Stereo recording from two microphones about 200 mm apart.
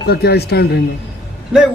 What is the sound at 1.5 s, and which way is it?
Speech, 5° right (ahead or behind).